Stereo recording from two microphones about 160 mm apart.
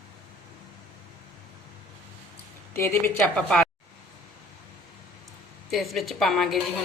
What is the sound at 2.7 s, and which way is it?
Speech, 15° left (ahead or behind).